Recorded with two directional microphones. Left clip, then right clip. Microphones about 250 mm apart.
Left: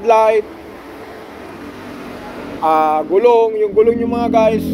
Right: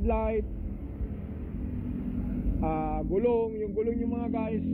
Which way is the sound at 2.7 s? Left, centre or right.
Centre.